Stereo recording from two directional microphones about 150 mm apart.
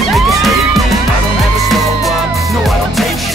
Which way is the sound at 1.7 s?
Centre (ahead or behind).